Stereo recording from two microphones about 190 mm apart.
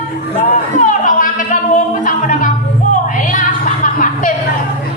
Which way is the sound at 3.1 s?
45° left (ahead or behind).